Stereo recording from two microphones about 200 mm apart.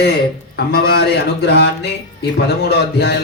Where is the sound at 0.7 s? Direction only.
50° left (ahead or behind).